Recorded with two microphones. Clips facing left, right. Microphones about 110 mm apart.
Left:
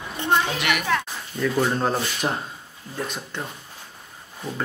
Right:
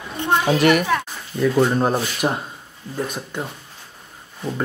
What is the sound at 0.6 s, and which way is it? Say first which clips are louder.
Speech: right 9 dB; 40° right (ahead or behind).